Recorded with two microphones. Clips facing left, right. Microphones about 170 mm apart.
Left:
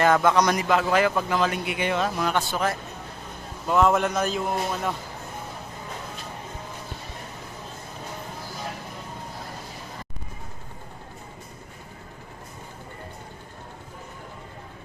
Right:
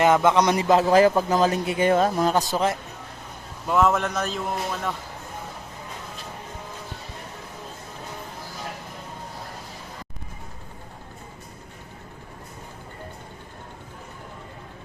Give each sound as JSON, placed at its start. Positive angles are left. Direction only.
{"t": 0.0, "sound": "a man's voice", "side_deg": -20}
{"t": 3.7, "sound": "a man's voice", "side_deg": 0}